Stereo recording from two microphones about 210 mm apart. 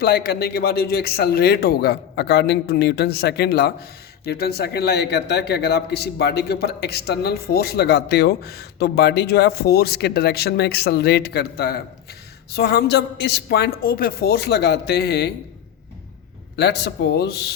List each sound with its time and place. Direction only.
0.0 s a man's voice: 45° left (ahead or behind)
16.6 s a man's voice: 50° left (ahead or behind)